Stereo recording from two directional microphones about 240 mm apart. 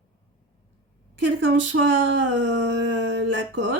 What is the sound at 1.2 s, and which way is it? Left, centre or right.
Speech, right.